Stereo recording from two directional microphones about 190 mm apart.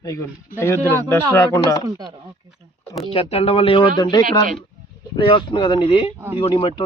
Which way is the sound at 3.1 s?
30° left (ahead or behind).